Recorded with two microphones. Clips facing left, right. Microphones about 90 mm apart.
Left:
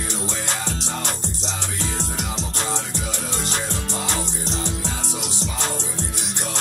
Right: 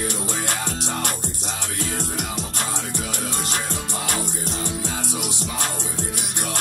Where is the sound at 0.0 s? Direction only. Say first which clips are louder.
Right 2 dB; 55° right (ahead or behind).